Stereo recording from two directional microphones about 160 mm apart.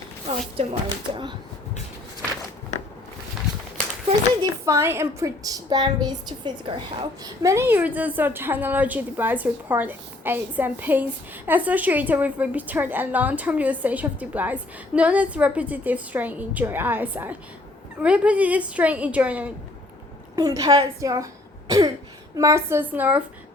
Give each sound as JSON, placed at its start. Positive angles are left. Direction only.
{"t": 0.3, "sound": "a woman's voice", "side_deg": -35}
{"t": 4.6, "sound": "a woman's voice", "side_deg": -15}
{"t": 7.4, "sound": "a woman's voice", "side_deg": -15}
{"t": 20.3, "sound": "a woman's voice", "side_deg": -20}